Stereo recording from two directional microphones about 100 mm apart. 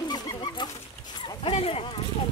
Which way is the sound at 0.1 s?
45° left (ahead or behind).